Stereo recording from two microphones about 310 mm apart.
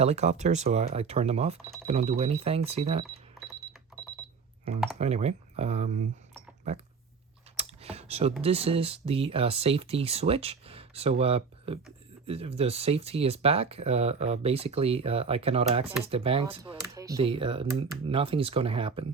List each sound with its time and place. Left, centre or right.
0.0 s speech: right
4.9 s speech: right
7.5 s computer keyboard: centre
8.4 s speech: centre